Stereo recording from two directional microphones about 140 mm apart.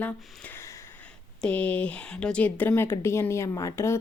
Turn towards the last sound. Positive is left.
turn(degrees=20)  # may be behind; listen again after turning